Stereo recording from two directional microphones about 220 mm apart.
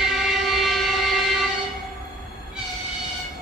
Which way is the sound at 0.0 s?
Centre (ahead or behind).